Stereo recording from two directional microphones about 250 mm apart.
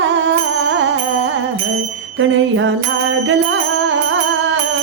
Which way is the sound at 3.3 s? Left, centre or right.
Right.